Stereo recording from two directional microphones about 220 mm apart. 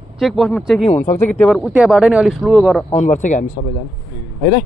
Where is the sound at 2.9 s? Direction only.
30° left (ahead or behind).